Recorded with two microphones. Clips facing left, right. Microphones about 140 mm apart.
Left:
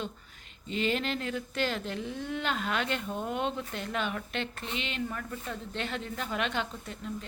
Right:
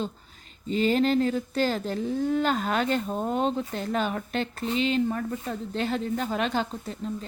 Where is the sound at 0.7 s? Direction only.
40° right (ahead or behind).